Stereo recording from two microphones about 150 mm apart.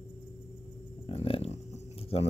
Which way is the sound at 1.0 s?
40° left (ahead or behind).